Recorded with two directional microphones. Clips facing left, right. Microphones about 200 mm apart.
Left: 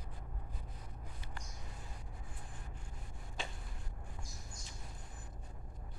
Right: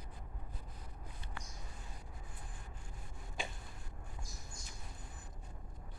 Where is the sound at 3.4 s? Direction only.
10° right (ahead or behind).